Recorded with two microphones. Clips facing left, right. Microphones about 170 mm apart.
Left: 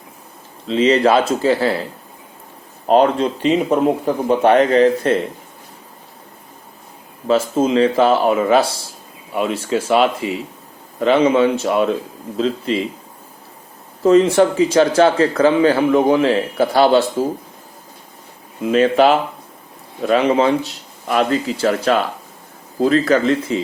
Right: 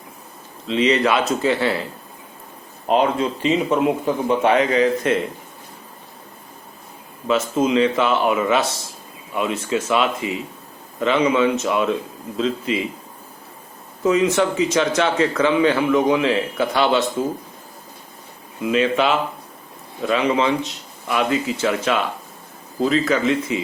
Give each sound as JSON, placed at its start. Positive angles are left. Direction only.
{"t": 0.7, "sound": "speech", "side_deg": 30}
{"t": 4.5, "sound": "speech", "side_deg": 50}
{"t": 7.3, "sound": "speech", "side_deg": 35}
{"t": 14.3, "sound": "speech", "side_deg": 35}
{"t": 18.6, "sound": "speech", "side_deg": 45}